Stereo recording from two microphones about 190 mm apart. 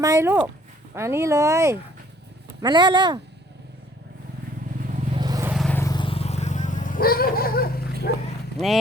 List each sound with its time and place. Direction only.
0.0 s speech: 15° right (ahead or behind)
5.1 s vehicle: 20° right (ahead or behind)
5.5 s vehicle: centre (ahead or behind)
5.7 s vehicle: 20° left (ahead or behind); by 7.9 s 50° left (ahead or behind)
8.1 s speech: 55° left (ahead or behind)
8.5 s speech: centre (ahead or behind)